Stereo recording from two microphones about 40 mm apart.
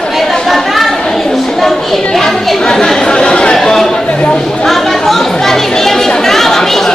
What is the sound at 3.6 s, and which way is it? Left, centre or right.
Chatter, centre.